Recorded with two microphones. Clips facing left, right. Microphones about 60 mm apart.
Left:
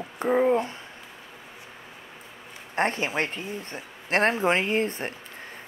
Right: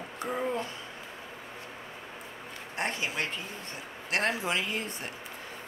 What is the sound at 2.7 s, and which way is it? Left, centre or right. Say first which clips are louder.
Speech: left 7 dB; left.